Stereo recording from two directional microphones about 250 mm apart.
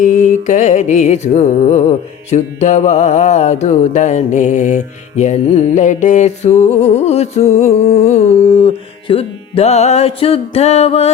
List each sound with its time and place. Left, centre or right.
0.0 s music: left